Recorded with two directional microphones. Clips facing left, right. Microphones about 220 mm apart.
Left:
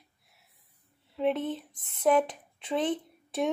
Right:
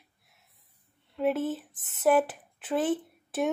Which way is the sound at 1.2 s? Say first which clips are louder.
Right 1 dB; 5° right (ahead or behind).